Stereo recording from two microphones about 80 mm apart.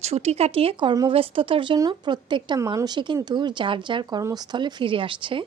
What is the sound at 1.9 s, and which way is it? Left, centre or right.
Speech, right.